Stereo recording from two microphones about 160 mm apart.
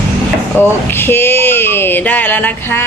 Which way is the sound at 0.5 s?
15° left (ahead or behind).